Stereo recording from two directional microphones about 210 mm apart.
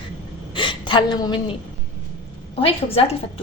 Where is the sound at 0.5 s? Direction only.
25° left (ahead or behind).